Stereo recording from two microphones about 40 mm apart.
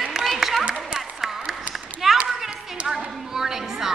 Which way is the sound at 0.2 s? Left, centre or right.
Centre.